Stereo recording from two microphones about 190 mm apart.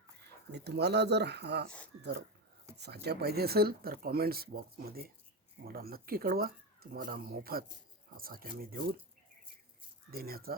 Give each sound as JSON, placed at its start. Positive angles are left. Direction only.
{"t": 0.5, "sound": "speech", "side_deg": -60}
{"t": 10.1, "sound": "speech", "side_deg": -50}